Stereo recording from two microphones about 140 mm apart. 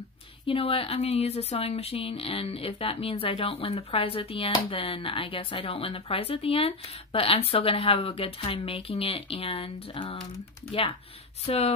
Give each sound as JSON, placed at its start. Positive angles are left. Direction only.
{"t": 0.5, "sound": "a woman's voice", "side_deg": 40}